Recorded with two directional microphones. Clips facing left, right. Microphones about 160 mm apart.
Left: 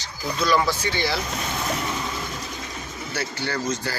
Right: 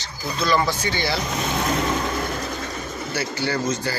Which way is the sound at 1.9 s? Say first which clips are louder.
Right 5 dB; 55° right (ahead or behind).